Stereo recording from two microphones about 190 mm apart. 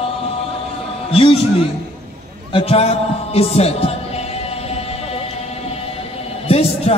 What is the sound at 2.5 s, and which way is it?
Speech, 30° left (ahead or behind).